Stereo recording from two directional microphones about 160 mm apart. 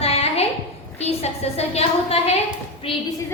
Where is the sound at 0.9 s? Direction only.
40° left (ahead or behind).